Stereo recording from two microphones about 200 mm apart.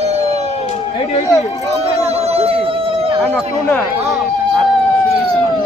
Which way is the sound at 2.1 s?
30° right (ahead or behind).